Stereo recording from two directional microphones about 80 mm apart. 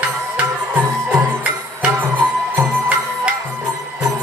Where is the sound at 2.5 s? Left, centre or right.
Centre.